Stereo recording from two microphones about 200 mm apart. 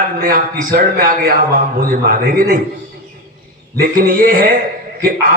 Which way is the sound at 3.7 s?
45° right (ahead or behind).